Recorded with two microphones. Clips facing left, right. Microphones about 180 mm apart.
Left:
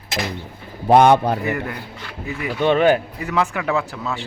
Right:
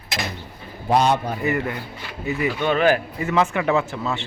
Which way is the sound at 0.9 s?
60° left (ahead or behind).